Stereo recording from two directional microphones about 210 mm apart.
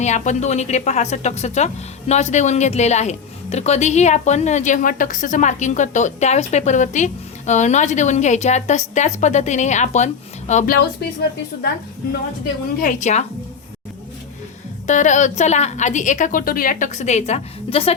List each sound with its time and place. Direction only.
0.0 s a woman's voice: 35° left (ahead or behind)
12.8 s a woman's voice: 35° left (ahead or behind)
14.8 s a woman's voice: 35° left (ahead or behind)